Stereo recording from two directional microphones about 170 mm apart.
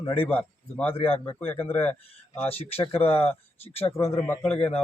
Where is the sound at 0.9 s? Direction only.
35° left (ahead or behind).